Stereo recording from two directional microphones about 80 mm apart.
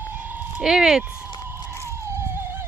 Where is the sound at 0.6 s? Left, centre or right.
Centre.